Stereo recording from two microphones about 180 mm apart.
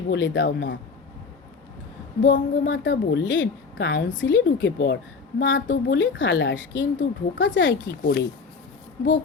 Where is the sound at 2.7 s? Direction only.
90° left.